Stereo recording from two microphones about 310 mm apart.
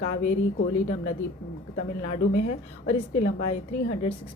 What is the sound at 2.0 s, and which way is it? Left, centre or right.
A woman's voice, left.